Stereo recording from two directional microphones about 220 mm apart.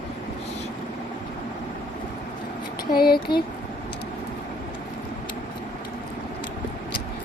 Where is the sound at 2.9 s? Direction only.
45° left (ahead or behind).